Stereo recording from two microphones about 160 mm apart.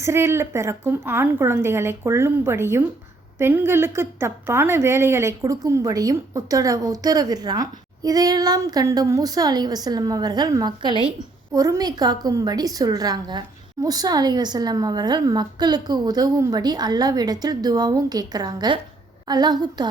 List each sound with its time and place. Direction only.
0.0 s a woman's voice: 15° right (ahead or behind)